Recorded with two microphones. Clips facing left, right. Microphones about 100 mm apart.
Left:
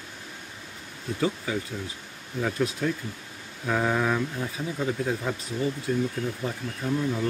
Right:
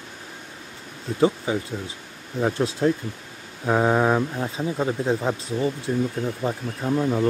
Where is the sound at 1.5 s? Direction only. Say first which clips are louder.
Right 4 dB; 25° right (ahead or behind).